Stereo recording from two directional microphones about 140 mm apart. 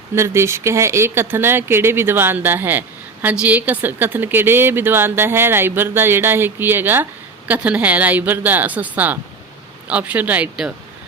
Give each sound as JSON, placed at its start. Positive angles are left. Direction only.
{"t": 0.2, "sound": "a woman's voice", "side_deg": -20}